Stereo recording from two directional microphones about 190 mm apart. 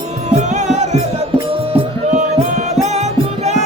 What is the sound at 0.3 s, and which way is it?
Music, 40° right (ahead or behind).